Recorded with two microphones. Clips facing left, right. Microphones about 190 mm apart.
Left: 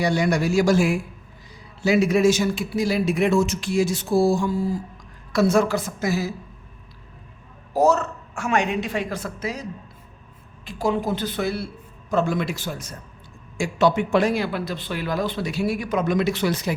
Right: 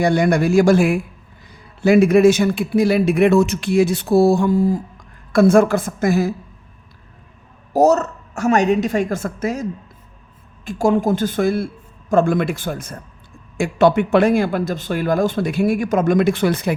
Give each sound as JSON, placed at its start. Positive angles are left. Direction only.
{"t": 0.0, "sound": "speech", "side_deg": -55}
{"t": 7.7, "sound": "speech", "side_deg": -40}
{"t": 10.7, "sound": "speech", "side_deg": -50}